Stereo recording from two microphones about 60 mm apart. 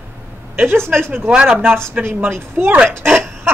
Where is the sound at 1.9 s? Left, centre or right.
Right.